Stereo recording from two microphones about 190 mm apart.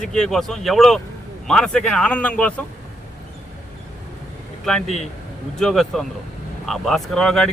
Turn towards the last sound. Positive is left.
turn(degrees=0)  # may be behind; listen again after turning